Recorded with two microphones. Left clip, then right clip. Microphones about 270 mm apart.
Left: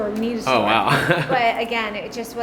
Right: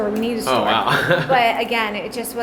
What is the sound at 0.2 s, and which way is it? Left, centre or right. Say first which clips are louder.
Speech: right 2 dB; right.